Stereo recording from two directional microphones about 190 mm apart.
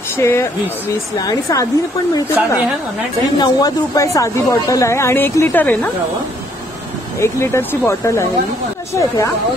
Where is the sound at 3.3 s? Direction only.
20° left (ahead or behind).